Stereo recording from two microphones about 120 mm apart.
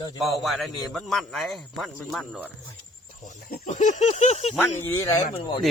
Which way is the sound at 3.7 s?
90° left.